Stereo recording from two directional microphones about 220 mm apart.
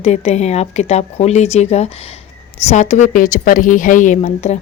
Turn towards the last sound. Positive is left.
turn(degrees=30)  # may be behind; listen again after turning